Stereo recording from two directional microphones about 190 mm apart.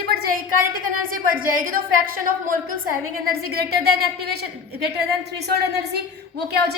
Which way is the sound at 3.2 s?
55° right (ahead or behind).